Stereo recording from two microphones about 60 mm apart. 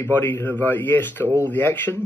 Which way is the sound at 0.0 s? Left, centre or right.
Left.